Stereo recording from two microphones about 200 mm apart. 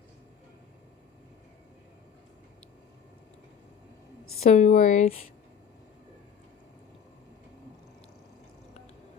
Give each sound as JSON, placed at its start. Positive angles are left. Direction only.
{"t": 4.4, "sound": "a woman's voice", "side_deg": 35}